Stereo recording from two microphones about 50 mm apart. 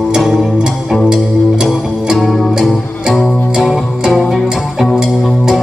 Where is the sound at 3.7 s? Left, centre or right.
Centre.